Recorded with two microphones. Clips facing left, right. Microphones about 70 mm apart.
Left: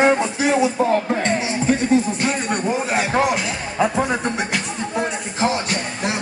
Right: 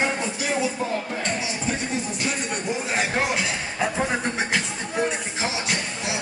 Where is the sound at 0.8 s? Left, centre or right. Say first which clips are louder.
Left 8 dB; left.